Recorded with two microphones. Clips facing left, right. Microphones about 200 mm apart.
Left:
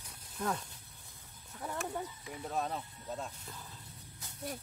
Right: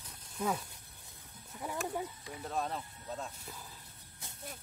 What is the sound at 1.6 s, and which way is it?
Speech, 10° right (ahead or behind).